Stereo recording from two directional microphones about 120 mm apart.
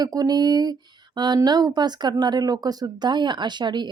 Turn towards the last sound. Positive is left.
turn(degrees=-40)  # may be behind; listen again after turning